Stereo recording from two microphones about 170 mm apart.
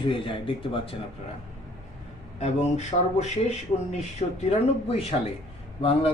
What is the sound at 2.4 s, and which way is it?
Speech, 40° left (ahead or behind).